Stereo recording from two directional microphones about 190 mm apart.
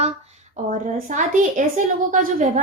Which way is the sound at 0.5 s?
40° right (ahead or behind).